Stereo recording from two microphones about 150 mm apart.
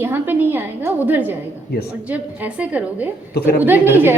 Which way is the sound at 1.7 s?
90° left.